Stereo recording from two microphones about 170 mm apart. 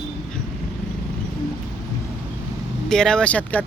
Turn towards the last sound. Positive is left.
turn(degrees=10)  # may be behind; listen again after turning